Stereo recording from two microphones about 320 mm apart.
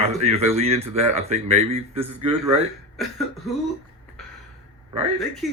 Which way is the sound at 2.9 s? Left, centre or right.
Centre.